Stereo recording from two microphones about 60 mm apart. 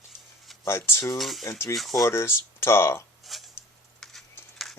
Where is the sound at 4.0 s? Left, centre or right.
Centre.